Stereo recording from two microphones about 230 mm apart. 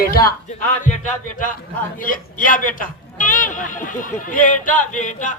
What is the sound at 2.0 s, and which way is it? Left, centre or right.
A man's voice, left.